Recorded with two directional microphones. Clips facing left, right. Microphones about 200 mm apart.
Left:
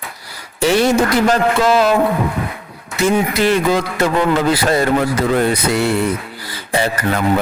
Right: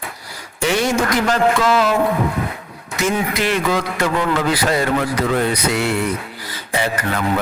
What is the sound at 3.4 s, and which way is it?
Speech, 35° left (ahead or behind).